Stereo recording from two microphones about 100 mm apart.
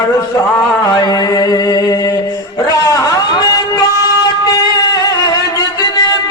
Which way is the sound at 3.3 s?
40° left (ahead or behind).